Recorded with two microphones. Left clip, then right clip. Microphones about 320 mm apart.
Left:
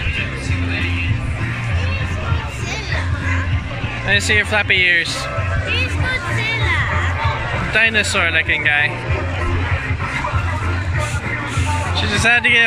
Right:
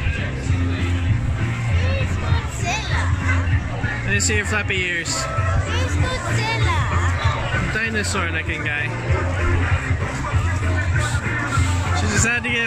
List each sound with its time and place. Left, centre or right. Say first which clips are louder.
4.1 s speech: left 7 dB; centre
6.4 s music: left 3 dB; centre
7.7 s speech: left 11 dB; centre
12.0 s speech: left 7 dB; centre